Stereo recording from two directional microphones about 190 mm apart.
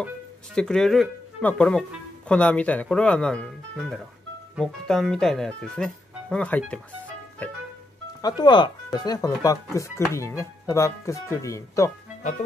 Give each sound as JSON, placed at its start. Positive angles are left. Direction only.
{"t": 0.6, "sound": "speech", "side_deg": 5}
{"t": 8.2, "sound": "speech", "side_deg": 20}